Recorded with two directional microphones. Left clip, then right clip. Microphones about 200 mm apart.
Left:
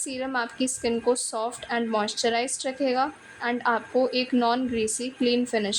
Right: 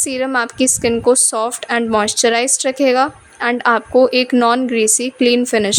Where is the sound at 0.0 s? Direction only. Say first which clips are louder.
Right 11 dB; 45° right (ahead or behind).